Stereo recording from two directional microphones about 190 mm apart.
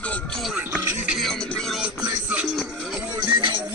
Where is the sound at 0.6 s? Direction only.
10° right (ahead or behind).